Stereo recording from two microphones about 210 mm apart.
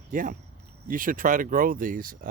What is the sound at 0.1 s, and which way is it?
Speech, 40° right (ahead or behind).